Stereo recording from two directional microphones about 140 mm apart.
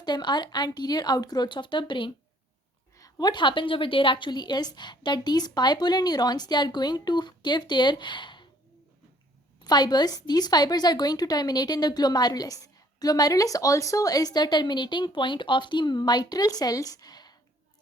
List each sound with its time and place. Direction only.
0.0 s a woman's voice: 30° left (ahead or behind)
9.6 s a woman's voice: 30° left (ahead or behind)